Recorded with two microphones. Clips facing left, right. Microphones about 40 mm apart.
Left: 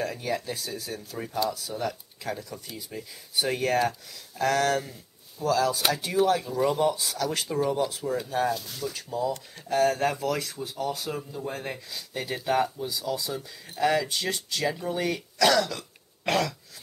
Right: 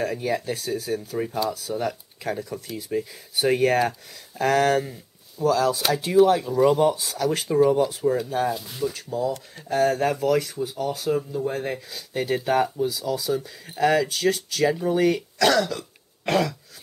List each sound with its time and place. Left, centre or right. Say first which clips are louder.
0.0 s speech: right 4 dB; centre
1.4 s speech: even; centre
14.1 s speech: right 6 dB; centre
14.6 s speech: right 8 dB; centre
16.3 s throat clearing: right 3 dB; centre